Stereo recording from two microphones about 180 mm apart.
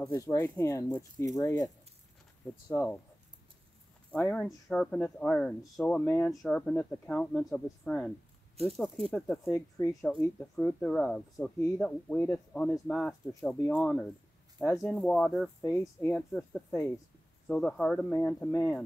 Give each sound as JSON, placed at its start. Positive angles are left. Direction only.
{"t": 0.1, "sound": "speech", "side_deg": 20}
{"t": 2.7, "sound": "speech", "side_deg": 10}
{"t": 4.1, "sound": "speech", "side_deg": 5}
{"t": 15.6, "sound": "speech", "side_deg": 15}